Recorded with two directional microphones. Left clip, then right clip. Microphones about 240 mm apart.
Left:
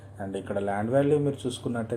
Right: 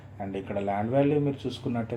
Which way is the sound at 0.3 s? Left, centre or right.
Left.